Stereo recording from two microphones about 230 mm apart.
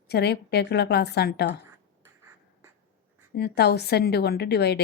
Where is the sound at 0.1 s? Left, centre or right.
Left.